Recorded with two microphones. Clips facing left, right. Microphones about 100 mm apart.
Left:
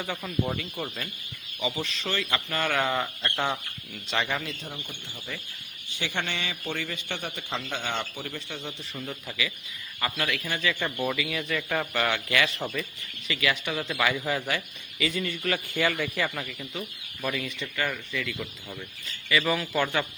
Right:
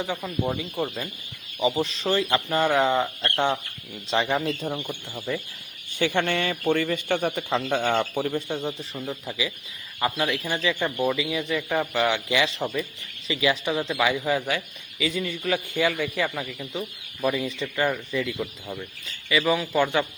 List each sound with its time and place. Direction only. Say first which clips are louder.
0.1 s a man's voice: right 3 dB; 5° right (ahead or behind)
1.5 s speech: right 7 dB; 35° right (ahead or behind)
3.2 s speech: right 4 dB; centre (ahead or behind)
3.4 s a man's voice: right 6 dB; 20° right (ahead or behind)
4.1 s speech: right 6 dB; 30° right (ahead or behind)
4.7 s a man's voice: right 9 dB; 45° right (ahead or behind)
6.0 s a man's voice: right 8 dB; 50° right (ahead or behind)
7.6 s a man's voice: right 9 dB; 45° right (ahead or behind)
8.5 s speech: right 8 dB; 40° right (ahead or behind)
8.9 s speech: right 4 dB; centre (ahead or behind)
10.0 s a man's voice: right 5 dB; 20° right (ahead or behind)
12.3 s a man's voice: right 3 dB; 20° right (ahead or behind)
13.9 s a man's voice: right 2 dB; 15° right (ahead or behind)